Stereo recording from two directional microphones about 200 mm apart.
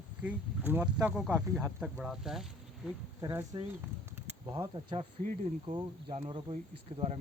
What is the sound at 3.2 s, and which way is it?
Speech, 20° right (ahead or behind).